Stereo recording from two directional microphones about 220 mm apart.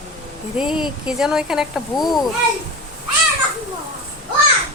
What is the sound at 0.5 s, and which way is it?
Speech, 5° right (ahead or behind).